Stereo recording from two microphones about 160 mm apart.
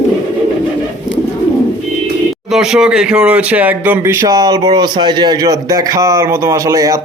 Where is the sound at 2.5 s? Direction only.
5° right (ahead or behind); by 7.0 s 20° right (ahead or behind).